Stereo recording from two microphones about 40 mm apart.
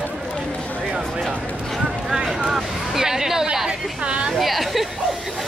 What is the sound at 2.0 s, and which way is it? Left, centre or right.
Vehicle, centre.